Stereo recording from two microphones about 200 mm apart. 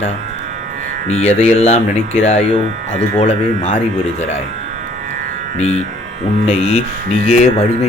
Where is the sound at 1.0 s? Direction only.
30° left (ahead or behind).